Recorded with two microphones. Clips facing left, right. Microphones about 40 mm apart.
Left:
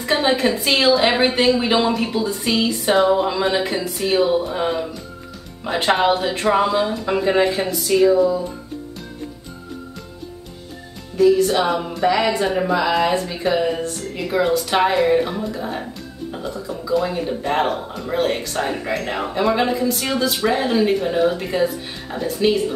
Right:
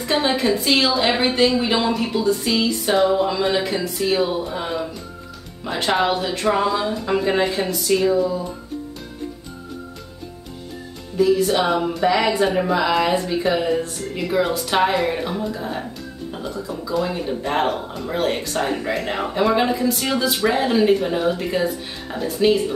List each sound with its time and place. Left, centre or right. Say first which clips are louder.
0.0 s a sound: left 2 dB; centre
0.7 s a woman's voice: left 4 dB; left
0.9 s speech: left 3 dB; centre
1.2 s a sound: left 1 dB; left
1.7 s speech: left 2 dB; centre
2.5 s a sound: left 1 dB; left
3.0 s speech: left 1 dB; centre
11.3 s speech: left 1 dB; centre
18.9 s speech: even; centre